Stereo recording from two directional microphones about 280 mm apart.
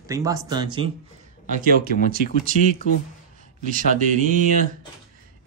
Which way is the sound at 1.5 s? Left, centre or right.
Right.